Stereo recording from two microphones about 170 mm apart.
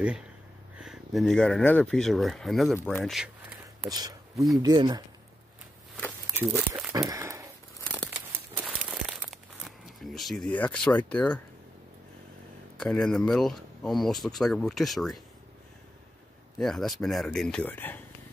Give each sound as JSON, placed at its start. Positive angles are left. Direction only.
{"t": 0.7, "sound": "speech", "side_deg": 0}
{"t": 3.9, "sound": "speech", "side_deg": -25}
{"t": 6.3, "sound": "speech", "side_deg": -10}
{"t": 6.9, "sound": "a sound", "side_deg": -20}
{"t": 7.8, "sound": "crumpling", "side_deg": 10}
{"t": 8.5, "sound": "crumpling", "side_deg": -5}
{"t": 11.0, "sound": "speech", "side_deg": 5}
{"t": 12.7, "sound": "speech", "side_deg": 5}
{"t": 16.5, "sound": "speech", "side_deg": 0}